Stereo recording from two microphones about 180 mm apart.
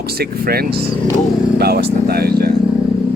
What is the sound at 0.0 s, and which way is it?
Speech, 60° right (ahead or behind).